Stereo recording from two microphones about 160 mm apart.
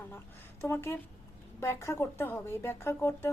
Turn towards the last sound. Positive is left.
turn(degrees=15)  # may be behind; listen again after turning